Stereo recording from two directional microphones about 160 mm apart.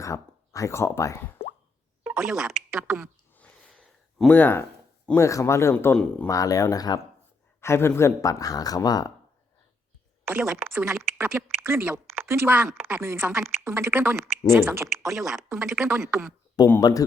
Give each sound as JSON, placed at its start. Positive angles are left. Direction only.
{"t": 0.0, "sound": "speech", "side_deg": 20}
{"t": 2.0, "sound": "speech", "side_deg": 0}
{"t": 3.3, "sound": "a sound", "side_deg": 10}
{"t": 5.0, "sound": "speech", "side_deg": 15}
{"t": 6.2, "sound": "speech", "side_deg": 20}
{"t": 10.2, "sound": "speech", "side_deg": -5}
{"t": 15.1, "sound": "speech", "side_deg": 0}
{"t": 16.8, "sound": "speech", "side_deg": 20}